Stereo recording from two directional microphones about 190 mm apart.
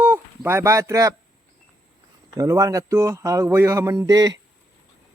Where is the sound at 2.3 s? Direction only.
15° right (ahead or behind).